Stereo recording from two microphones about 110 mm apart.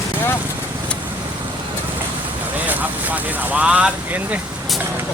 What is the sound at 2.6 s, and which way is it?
Vehicle, 15° right (ahead or behind).